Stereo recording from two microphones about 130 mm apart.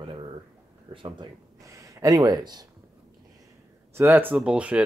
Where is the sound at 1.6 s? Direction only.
25° right (ahead or behind).